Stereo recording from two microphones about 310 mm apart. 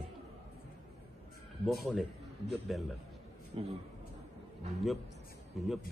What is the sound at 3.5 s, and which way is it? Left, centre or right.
Speech, centre.